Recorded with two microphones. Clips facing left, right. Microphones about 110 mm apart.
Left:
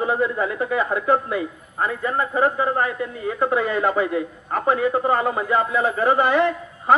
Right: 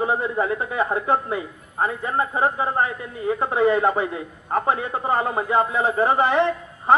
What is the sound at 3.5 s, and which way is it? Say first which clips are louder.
A man's voice: right 4 dB; 25° right (ahead or behind).